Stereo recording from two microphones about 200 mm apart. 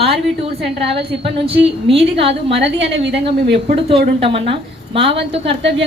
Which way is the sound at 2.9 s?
60° right (ahead or behind).